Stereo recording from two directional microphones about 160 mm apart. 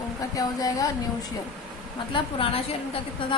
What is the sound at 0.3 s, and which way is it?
Speech, 20° left (ahead or behind).